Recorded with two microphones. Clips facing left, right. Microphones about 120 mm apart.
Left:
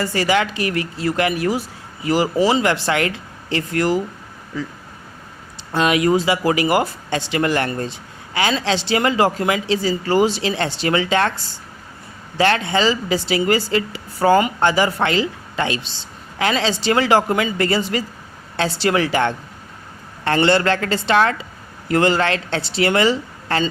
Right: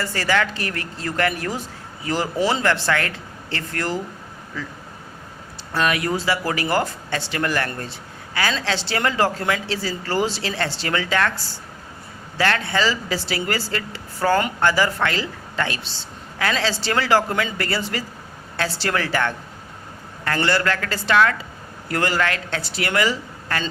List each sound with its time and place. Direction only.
0.0 s speech: 15° left (ahead or behind)
5.7 s speech: 20° left (ahead or behind)
12.4 s speech: 20° left (ahead or behind)